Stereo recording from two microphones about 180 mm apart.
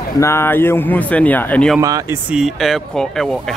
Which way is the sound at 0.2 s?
15° left (ahead or behind).